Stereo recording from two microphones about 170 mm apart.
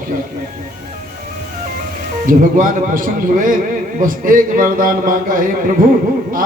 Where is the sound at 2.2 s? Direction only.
55° right (ahead or behind).